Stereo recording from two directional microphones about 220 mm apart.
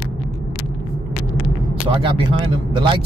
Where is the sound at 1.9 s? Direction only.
25° right (ahead or behind).